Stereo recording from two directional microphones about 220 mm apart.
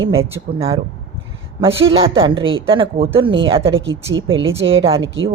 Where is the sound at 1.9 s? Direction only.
25° right (ahead or behind).